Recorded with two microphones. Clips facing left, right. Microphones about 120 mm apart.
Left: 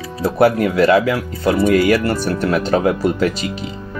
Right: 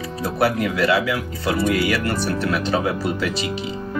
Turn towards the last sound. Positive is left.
turn(degrees=45)  # may be behind; listen again after turning